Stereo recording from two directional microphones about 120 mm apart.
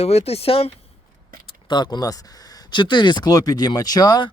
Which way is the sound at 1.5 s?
40° left (ahead or behind).